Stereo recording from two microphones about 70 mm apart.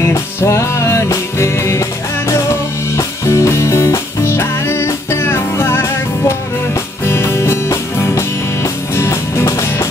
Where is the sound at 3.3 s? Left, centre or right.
Left.